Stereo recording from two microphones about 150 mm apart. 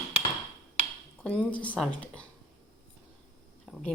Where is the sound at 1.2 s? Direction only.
10° left (ahead or behind).